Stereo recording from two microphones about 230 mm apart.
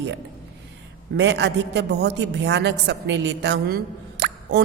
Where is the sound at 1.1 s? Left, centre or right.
Right.